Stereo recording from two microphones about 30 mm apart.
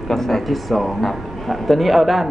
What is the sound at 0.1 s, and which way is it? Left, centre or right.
Speech, centre.